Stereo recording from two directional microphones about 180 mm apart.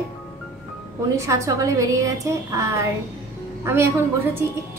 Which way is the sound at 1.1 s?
15° right (ahead or behind).